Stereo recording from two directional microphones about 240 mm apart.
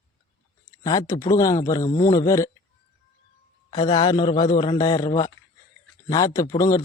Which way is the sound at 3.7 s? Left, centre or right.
Centre.